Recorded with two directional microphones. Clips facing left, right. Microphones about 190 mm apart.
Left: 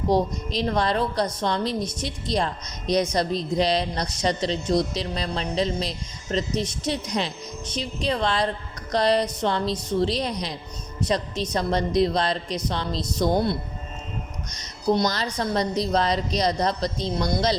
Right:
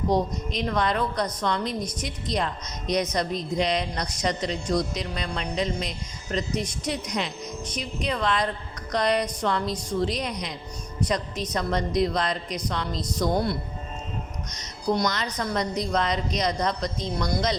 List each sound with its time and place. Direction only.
0.1 s a woman's voice: 30° left (ahead or behind)
11.5 s a woman's voice: 30° left (ahead or behind)
14.8 s a woman's voice: 25° left (ahead or behind)